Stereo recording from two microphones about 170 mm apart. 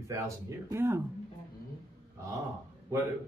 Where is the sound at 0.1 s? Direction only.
20° right (ahead or behind).